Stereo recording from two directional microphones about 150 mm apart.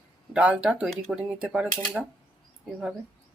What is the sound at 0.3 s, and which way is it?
Speech, 5° right (ahead or behind).